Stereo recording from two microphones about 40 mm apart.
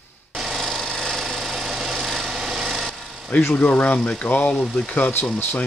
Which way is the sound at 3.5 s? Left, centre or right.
Left.